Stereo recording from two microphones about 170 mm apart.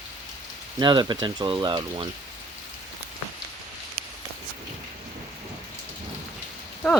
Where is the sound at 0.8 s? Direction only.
25° right (ahead or behind).